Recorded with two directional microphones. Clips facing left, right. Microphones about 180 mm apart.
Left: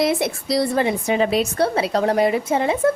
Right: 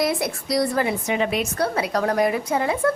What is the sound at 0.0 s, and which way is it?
A woman's voice, 25° left (ahead or behind).